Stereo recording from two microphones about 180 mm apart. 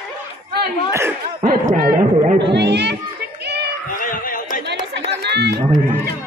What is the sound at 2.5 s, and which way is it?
Children playing, 70° right (ahead or behind).